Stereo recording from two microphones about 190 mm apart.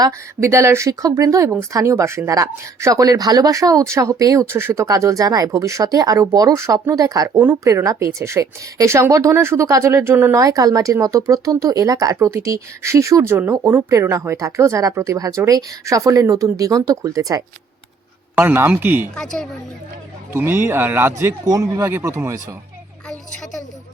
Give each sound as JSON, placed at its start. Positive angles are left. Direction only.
{"t": 0.4, "sound": "speech", "side_deg": -15}
{"t": 19.1, "sound": "speech", "side_deg": 5}
{"t": 20.3, "sound": "speech", "side_deg": -10}
{"t": 23.0, "sound": "a sound", "side_deg": 0}